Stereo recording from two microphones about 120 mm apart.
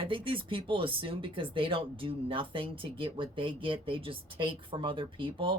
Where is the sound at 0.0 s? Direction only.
45° right (ahead or behind).